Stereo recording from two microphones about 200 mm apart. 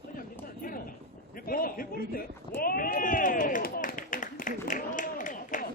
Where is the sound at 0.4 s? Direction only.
45° left (ahead or behind).